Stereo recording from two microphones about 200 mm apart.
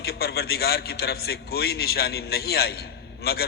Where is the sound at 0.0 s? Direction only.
50° left (ahead or behind).